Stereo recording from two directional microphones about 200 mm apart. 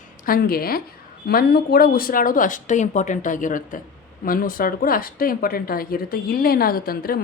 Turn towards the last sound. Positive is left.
turn(degrees=50)  # may be behind; listen again after turning